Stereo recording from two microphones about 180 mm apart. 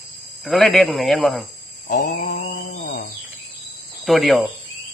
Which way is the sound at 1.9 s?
45° left (ahead or behind).